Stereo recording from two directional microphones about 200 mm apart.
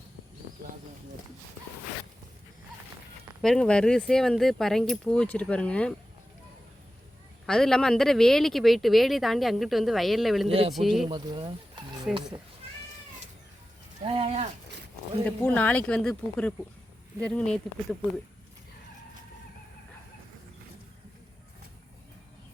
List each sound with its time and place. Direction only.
3.4 s speech: 5° left (ahead or behind)
7.4 s speech: 5° left (ahead or behind)
11.1 s speech: 25° right (ahead or behind)
12.1 s speech: 5° right (ahead or behind)
14.0 s speech: 30° right (ahead or behind)
15.4 s speech: 10° left (ahead or behind)